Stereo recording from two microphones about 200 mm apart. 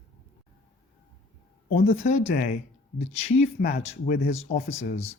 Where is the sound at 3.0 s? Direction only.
35° left (ahead or behind).